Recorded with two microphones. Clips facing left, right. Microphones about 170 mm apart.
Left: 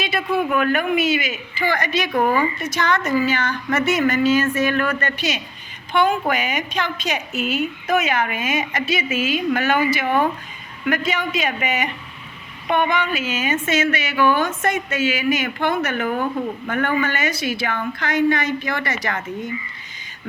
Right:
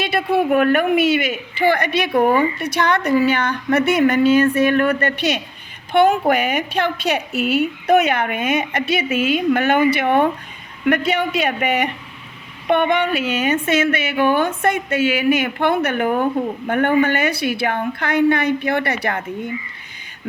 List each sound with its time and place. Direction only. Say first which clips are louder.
0.0 s a woman's voice: right 3 dB; 60° right (ahead or behind)